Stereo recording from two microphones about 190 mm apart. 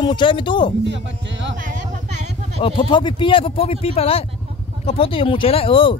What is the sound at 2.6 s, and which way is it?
Speech, 25° left (ahead or behind).